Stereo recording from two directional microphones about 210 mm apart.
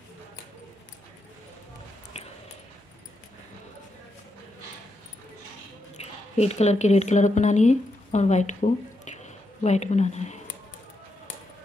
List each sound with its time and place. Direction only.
5.9 s speech: 30° left (ahead or behind)